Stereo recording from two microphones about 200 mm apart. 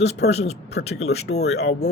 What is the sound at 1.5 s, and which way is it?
Speech, 35° left (ahead or behind).